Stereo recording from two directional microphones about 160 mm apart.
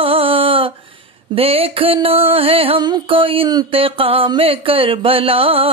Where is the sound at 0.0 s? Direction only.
35° right (ahead or behind).